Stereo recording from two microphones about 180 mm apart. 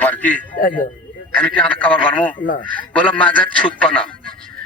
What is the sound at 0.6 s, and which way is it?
Speech, 50° left (ahead or behind).